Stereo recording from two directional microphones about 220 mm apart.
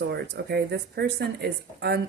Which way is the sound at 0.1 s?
50° right (ahead or behind).